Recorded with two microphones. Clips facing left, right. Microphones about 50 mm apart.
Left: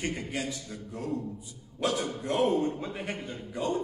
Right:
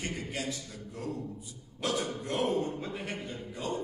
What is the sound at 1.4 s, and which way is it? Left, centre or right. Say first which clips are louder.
Speech: left 4 dB; centre.